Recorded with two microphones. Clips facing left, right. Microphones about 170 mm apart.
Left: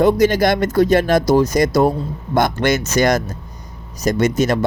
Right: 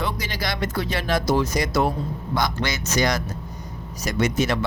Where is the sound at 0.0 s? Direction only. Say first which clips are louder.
Left 15 dB; 50° left (ahead or behind).